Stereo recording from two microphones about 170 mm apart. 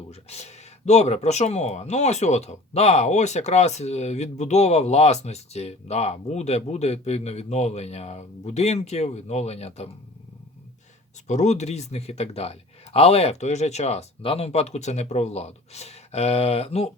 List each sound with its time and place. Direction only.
0.1 s speech: 40° left (ahead or behind)
11.3 s speech: 45° left (ahead or behind)